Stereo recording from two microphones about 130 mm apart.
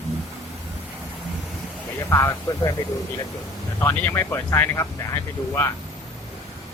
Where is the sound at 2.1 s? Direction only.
20° left (ahead or behind).